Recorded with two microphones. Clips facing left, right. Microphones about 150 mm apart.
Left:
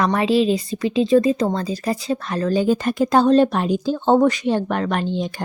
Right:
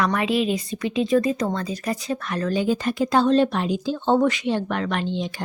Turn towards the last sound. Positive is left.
turn(degrees=45)  # may be behind; listen again after turning